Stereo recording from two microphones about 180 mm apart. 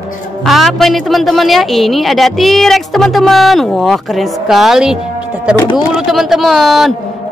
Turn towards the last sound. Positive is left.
turn(degrees=0)  # may be behind; listen again after turning